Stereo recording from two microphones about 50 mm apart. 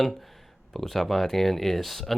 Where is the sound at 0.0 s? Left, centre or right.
Centre.